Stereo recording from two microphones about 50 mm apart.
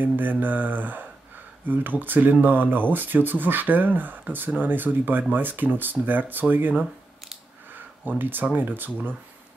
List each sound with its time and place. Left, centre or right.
0.0 s speech: right
8.2 s speech: right